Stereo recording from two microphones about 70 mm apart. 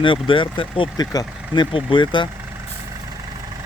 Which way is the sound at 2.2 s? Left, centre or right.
Left.